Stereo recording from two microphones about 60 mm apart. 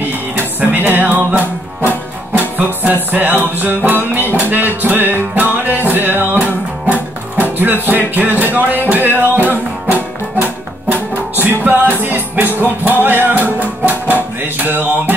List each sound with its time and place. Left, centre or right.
0.4 s music: right
1.4 s music: left
2.3 s music: right